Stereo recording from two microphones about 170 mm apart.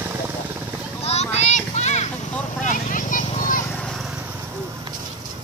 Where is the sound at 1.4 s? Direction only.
40° left (ahead or behind).